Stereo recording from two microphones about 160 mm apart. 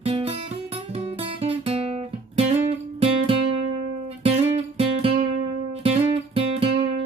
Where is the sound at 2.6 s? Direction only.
35° right (ahead or behind).